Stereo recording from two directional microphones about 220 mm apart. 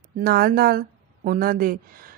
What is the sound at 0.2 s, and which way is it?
A woman's voice, 45° right (ahead or behind).